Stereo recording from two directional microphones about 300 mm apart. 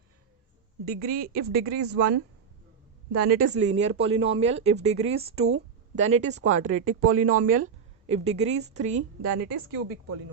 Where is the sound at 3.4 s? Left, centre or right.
Right.